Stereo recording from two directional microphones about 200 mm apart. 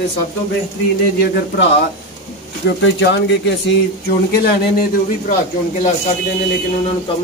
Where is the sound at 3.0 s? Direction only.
60° left (ahead or behind).